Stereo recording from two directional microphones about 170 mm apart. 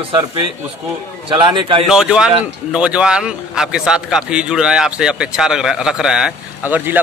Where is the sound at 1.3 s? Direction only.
30° right (ahead or behind).